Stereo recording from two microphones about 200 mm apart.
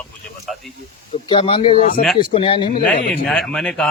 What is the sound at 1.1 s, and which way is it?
Speech, 25° left (ahead or behind).